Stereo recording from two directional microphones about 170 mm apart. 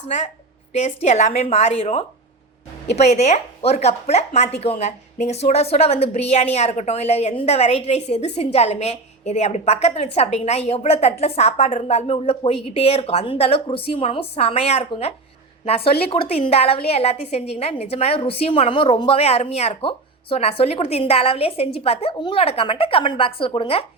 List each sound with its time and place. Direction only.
0.7 s a woman's voice: 40° left (ahead or behind)